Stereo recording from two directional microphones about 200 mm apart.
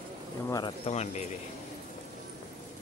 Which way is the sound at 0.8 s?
35° left (ahead or behind).